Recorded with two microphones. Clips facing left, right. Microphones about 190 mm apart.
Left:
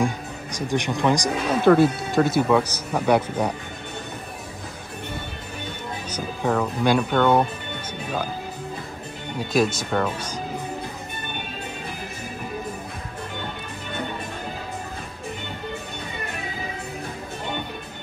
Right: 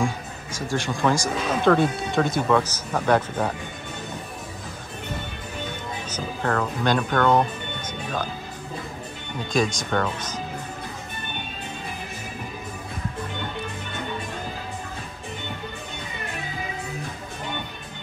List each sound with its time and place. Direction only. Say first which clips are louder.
0.0 s speech: left 2 dB; 20° left (ahead or behind)
1.7 s speech: left 4 dB; 5° left (ahead or behind)
6.0 s speech: left 2 dB; 10° left (ahead or behind)
9.5 s speech: left 2 dB; 5° left (ahead or behind)